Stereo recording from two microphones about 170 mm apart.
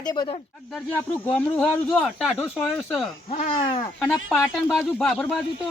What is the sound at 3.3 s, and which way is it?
Speech, 40° left (ahead or behind).